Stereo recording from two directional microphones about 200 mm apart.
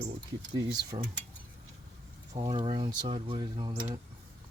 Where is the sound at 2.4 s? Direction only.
25° right (ahead or behind).